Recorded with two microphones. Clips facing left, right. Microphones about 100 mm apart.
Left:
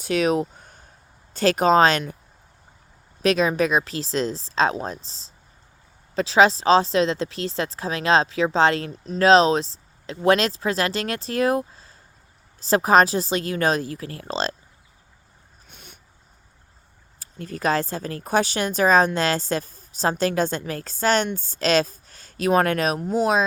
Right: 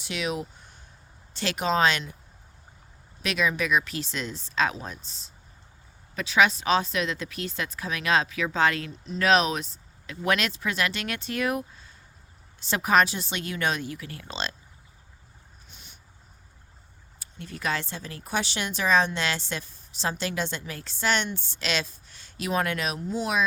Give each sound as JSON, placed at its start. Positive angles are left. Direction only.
{"t": 0.0, "sound": "speech", "side_deg": 45}
{"t": 3.2, "sound": "speech", "side_deg": 40}
{"t": 15.7, "sound": "a sound", "side_deg": 55}
{"t": 17.2, "sound": "speech", "side_deg": 40}